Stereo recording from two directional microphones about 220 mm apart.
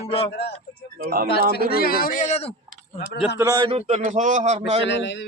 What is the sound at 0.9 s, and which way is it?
Speech, 40° right (ahead or behind).